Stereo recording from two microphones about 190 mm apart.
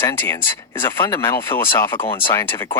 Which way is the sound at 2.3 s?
10° left (ahead or behind).